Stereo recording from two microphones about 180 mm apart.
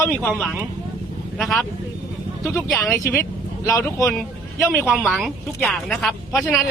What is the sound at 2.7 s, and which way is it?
Speech, 5° left (ahead or behind).